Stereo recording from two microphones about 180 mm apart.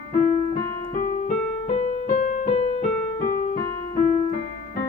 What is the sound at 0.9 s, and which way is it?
Music, 45° left (ahead or behind).